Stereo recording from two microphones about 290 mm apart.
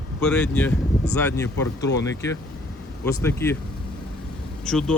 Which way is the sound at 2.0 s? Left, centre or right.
Centre.